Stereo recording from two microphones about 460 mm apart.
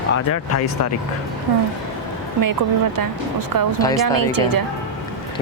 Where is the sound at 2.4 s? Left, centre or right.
Right.